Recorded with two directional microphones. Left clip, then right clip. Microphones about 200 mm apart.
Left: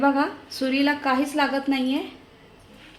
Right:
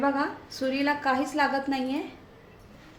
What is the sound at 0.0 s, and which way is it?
A woman's voice, 40° left (ahead or behind).